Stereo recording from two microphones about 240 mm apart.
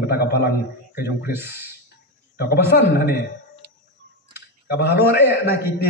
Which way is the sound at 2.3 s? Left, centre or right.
Left.